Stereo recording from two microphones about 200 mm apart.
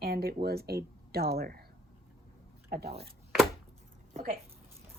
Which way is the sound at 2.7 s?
50° right (ahead or behind).